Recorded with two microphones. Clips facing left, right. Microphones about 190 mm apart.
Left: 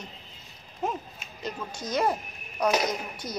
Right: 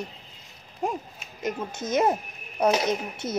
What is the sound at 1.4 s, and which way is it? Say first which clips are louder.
A woman's voice: right 5 dB; 20° right (ahead or behind).